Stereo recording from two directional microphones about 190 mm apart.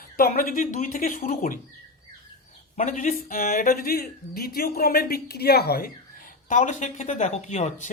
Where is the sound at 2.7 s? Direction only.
40° left (ahead or behind).